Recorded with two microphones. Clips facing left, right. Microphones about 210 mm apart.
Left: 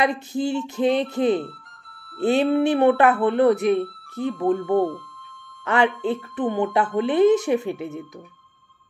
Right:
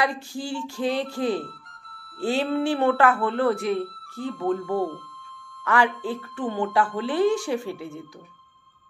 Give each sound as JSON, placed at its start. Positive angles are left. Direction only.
{"t": 0.0, "sound": "speech", "side_deg": 20}